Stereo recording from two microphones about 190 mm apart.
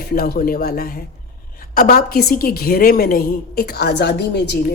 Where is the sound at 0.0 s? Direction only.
50° left (ahead or behind).